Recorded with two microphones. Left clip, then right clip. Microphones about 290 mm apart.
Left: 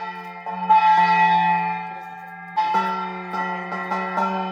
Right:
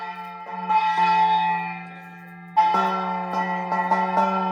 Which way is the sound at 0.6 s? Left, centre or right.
Left.